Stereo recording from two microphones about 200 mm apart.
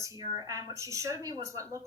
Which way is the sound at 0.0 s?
15° right (ahead or behind).